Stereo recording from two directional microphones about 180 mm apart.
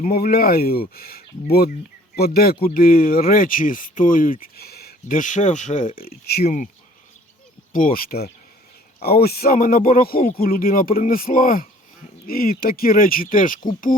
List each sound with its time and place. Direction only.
0.0 s speech: 55° left (ahead or behind)
7.7 s speech: 50° left (ahead or behind)